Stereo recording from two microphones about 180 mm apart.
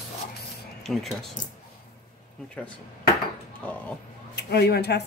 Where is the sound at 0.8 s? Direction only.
Centre (ahead or behind).